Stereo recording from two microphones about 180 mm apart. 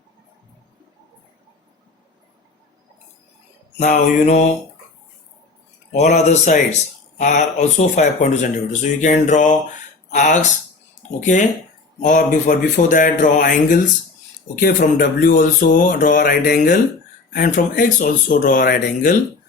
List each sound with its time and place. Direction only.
3.8 s mantra: 40° left (ahead or behind)
5.9 s mantra: 40° left (ahead or behind)
7.2 s speech: 40° left (ahead or behind)